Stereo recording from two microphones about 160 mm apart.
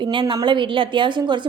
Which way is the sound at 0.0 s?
30° right (ahead or behind).